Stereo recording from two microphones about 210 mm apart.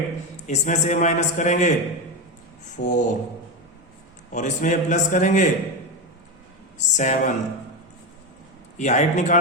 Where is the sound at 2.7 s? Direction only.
35° left (ahead or behind).